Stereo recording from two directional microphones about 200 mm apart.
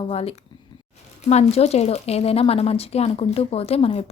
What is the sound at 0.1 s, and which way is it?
A woman's voice, 30° left (ahead or behind).